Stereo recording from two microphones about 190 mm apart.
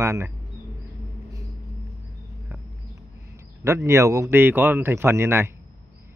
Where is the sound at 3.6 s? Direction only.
15° right (ahead or behind).